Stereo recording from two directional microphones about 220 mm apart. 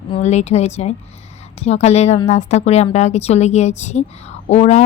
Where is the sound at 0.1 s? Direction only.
30° left (ahead or behind).